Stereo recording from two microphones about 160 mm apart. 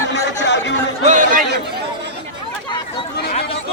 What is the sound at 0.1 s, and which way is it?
Chatter, 90° left.